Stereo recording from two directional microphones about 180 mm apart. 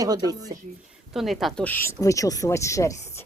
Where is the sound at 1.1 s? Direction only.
Centre (ahead or behind); by 3.2 s 15° left (ahead or behind).